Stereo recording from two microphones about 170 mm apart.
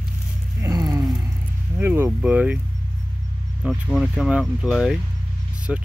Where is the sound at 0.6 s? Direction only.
20° right (ahead or behind).